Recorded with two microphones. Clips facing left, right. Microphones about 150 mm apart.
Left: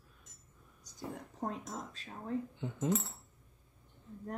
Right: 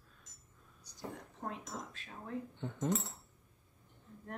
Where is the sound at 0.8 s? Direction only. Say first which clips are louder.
Left 2 dB; 45° left (ahead or behind).